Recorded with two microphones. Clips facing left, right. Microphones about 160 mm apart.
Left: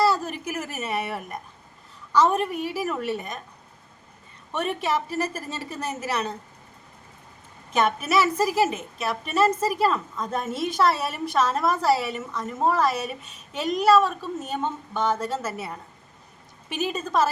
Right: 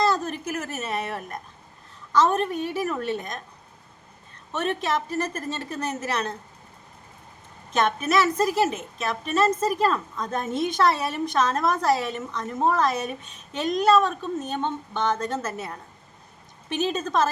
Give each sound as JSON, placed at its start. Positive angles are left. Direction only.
{"t": 0.0, "sound": "a woman's voice", "side_deg": 10}
{"t": 4.5, "sound": "a woman's voice", "side_deg": 10}
{"t": 7.7, "sound": "a woman's voice", "side_deg": 10}